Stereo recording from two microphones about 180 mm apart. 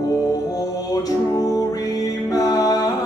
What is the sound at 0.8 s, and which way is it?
Music, 20° left (ahead or behind).